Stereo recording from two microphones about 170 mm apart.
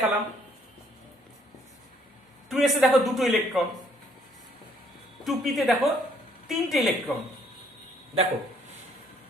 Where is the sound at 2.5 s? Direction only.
Centre (ahead or behind).